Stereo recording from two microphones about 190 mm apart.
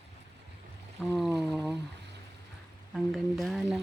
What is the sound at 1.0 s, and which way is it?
Speech, centre (ahead or behind).